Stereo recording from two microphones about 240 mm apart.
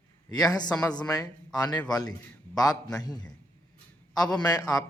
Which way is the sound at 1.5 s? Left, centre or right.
Centre.